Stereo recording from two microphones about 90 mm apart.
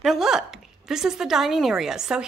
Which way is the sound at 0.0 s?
5° right (ahead or behind).